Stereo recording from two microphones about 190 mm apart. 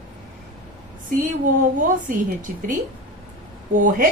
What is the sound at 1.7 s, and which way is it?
A woman's voice, 45° right (ahead or behind).